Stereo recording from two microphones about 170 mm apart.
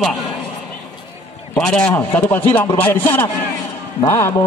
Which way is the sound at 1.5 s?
5° left (ahead or behind).